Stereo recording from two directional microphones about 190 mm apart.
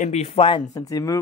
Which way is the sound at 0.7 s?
20° left (ahead or behind).